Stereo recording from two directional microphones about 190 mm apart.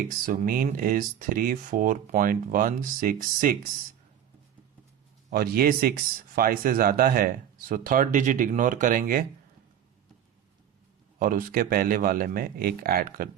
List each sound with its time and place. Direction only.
0.1 s speech: 45° right (ahead or behind)
5.3 s speech: 50° right (ahead or behind)
11.2 s speech: 45° right (ahead or behind)